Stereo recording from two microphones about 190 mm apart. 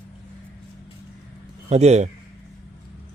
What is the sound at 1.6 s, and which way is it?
Speech, 35° right (ahead or behind).